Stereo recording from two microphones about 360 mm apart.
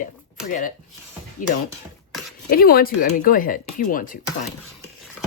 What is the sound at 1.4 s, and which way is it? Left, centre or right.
Speech, left.